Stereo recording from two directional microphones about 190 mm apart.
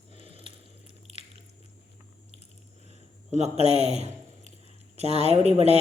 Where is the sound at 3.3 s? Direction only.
35° right (ahead or behind).